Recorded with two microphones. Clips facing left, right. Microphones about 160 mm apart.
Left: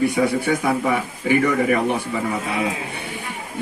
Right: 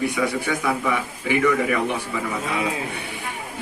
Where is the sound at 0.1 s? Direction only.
35° left (ahead or behind).